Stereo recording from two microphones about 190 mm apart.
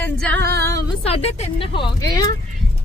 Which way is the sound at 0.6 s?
15° left (ahead or behind).